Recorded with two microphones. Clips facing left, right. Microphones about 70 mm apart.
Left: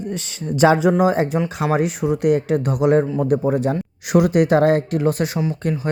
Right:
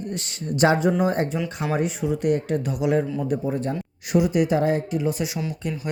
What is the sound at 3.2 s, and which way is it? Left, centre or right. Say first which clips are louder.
Speech: left 7 dB; left.